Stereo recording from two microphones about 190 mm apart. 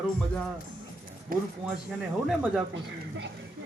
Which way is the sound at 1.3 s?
50° right (ahead or behind).